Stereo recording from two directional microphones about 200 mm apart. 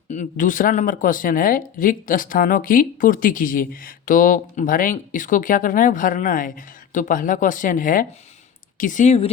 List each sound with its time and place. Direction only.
0.1 s speech: 40° left (ahead or behind)